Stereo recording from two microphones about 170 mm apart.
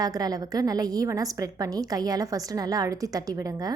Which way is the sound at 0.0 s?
20° right (ahead or behind).